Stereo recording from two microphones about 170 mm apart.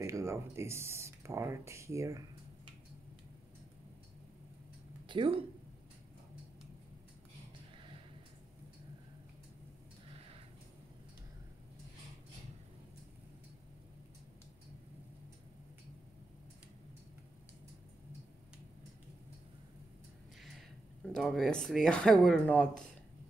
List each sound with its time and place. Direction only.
0.0 s speech: 15° right (ahead or behind)
5.0 s speech: 30° right (ahead or behind)
21.0 s speech: 5° left (ahead or behind)